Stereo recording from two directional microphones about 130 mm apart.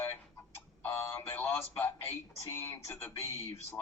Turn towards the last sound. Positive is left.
turn(degrees=20)  # may be behind; listen again after turning